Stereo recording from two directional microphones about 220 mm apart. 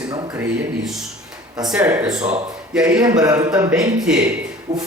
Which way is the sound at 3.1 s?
15° right (ahead or behind).